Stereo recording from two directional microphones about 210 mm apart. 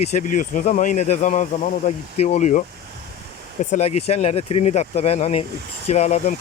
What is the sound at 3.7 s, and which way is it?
Speech, 30° left (ahead or behind).